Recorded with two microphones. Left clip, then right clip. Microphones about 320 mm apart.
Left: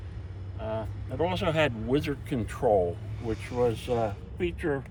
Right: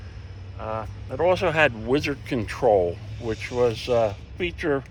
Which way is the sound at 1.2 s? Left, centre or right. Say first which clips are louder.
Right 7 dB; centre.